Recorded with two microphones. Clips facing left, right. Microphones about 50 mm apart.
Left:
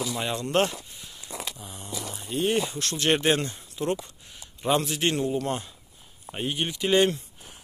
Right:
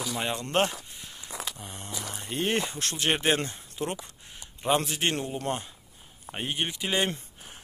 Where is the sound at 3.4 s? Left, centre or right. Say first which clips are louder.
Left 2 dB; right.